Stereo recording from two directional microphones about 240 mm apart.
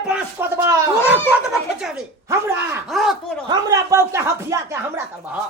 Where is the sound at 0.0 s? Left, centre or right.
Centre.